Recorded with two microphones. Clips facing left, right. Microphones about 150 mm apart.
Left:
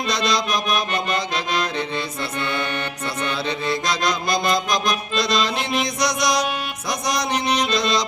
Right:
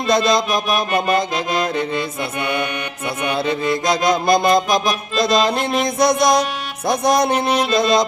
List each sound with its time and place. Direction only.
0.1 s music: 50° right (ahead or behind)
2.4 s music: 15° right (ahead or behind)
3.3 s music: 50° right (ahead or behind)